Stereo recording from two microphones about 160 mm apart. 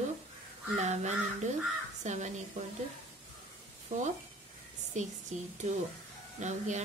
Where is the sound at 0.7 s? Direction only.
45° right (ahead or behind).